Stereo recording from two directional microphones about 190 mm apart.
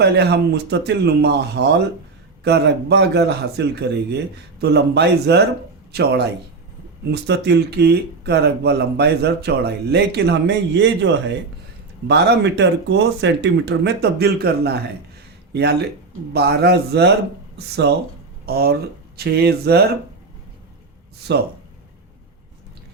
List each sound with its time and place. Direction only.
0.0 s speech: 60° right (ahead or behind)
18.4 s speech: 55° right (ahead or behind)
21.3 s speech: 65° right (ahead or behind)